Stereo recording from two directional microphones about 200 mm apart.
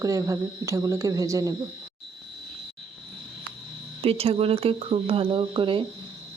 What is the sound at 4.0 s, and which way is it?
A woman's voice, 30° right (ahead or behind).